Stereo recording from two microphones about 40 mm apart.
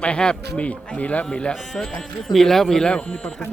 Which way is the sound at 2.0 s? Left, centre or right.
Centre.